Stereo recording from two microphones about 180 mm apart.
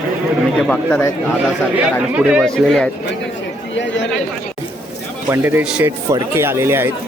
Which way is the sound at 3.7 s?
85° left.